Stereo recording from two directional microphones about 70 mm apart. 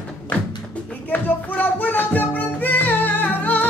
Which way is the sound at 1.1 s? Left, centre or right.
Left.